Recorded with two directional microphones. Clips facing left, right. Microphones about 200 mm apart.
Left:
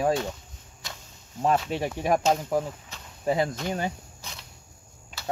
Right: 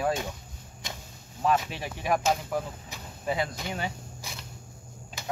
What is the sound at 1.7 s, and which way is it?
Speech, 40° left (ahead or behind).